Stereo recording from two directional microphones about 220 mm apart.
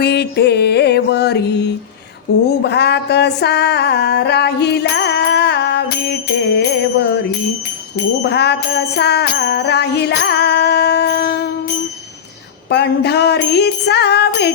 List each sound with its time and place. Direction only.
0.0 s music: 50° left (ahead or behind)
2.5 s a sound: 50° left (ahead or behind)
6.6 s music: 50° left (ahead or behind)
12.7 s music: 50° left (ahead or behind)